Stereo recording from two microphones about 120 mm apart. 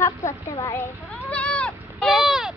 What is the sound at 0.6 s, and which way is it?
Speech, 20° left (ahead or behind).